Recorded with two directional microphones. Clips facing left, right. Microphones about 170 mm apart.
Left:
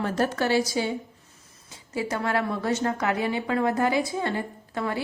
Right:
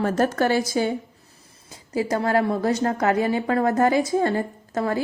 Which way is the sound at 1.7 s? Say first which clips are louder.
Right 5 dB; 35° right (ahead or behind).